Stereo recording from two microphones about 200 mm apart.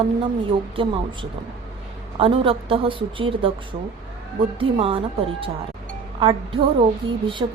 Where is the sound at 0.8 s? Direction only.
25° right (ahead or behind).